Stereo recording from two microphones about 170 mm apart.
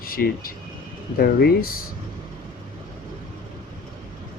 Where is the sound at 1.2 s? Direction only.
65° left (ahead or behind).